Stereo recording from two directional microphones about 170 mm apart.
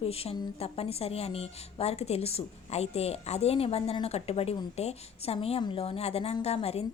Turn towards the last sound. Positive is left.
turn(degrees=35)  # may be behind; listen again after turning